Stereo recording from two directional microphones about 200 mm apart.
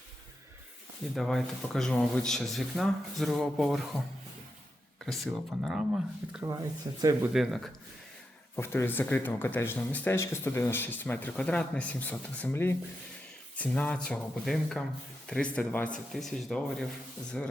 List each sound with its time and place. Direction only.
1.1 s speech: centre (ahead or behind)
7.0 s speech: 15° right (ahead or behind)
7.3 s speech: centre (ahead or behind)
8.5 s speech: 10° left (ahead or behind)